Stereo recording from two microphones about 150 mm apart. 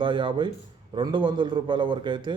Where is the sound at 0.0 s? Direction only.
35° right (ahead or behind).